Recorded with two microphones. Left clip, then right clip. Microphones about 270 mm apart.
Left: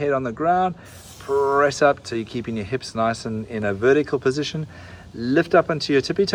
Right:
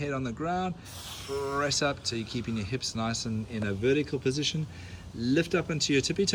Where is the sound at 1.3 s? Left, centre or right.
Left.